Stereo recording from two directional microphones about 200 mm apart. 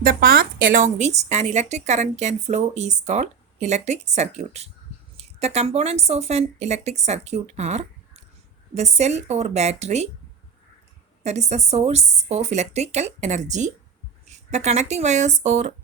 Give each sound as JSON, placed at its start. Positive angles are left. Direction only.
{"t": 0.0, "sound": "a woman's voice", "side_deg": -45}
{"t": 11.2, "sound": "a woman's voice", "side_deg": -35}